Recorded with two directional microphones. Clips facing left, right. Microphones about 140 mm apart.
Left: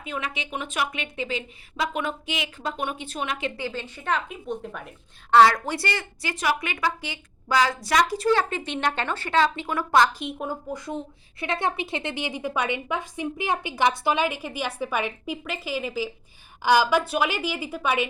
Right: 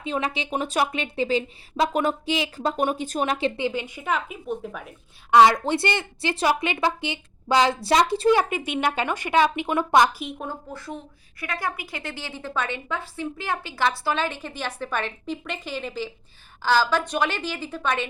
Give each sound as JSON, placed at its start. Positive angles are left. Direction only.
{"t": 0.0, "sound": "speech", "side_deg": -30}
{"t": 3.6, "sound": "speech", "side_deg": -15}
{"t": 5.3, "sound": "speech", "side_deg": -15}
{"t": 8.3, "sound": "speech", "side_deg": -15}
{"t": 10.2, "sound": "a woman's voice", "side_deg": 0}
{"t": 10.7, "sound": "a woman's voice", "side_deg": 20}